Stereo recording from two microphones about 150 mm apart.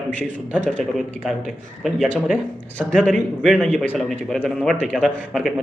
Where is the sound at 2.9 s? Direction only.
10° left (ahead or behind).